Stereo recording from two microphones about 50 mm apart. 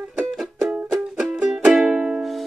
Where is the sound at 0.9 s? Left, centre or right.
Centre.